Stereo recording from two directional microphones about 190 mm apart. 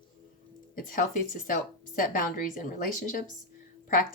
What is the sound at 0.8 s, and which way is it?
A woman's voice, 45° left (ahead or behind).